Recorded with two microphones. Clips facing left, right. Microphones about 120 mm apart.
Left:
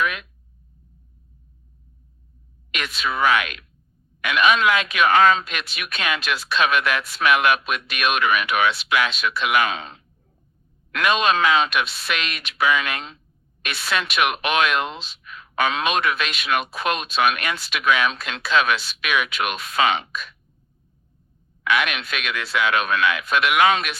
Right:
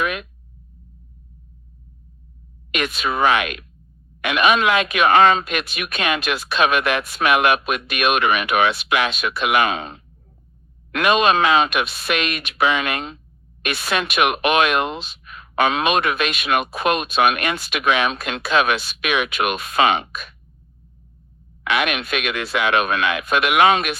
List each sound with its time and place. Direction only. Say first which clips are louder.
0.0 s a sound: right 1 dB; 50° right (ahead or behind)
2.7 s speech: right 4 dB; 50° right (ahead or behind)
21.8 s speech: right 3 dB; 50° right (ahead or behind)